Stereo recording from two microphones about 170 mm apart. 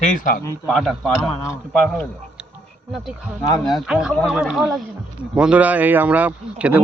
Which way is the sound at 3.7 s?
5° right (ahead or behind).